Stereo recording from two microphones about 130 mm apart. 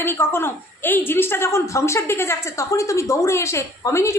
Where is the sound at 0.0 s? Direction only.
15° left (ahead or behind).